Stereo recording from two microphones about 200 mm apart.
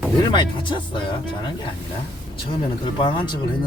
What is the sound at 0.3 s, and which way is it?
Speech, 25° left (ahead or behind).